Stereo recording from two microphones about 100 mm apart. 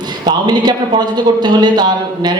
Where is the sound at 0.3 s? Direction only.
45° right (ahead or behind).